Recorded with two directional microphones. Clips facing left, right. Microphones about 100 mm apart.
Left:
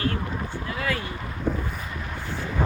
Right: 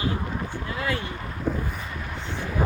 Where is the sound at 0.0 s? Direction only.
15° right (ahead or behind).